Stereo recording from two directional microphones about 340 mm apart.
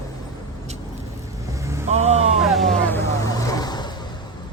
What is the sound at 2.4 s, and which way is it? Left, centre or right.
Speech, centre.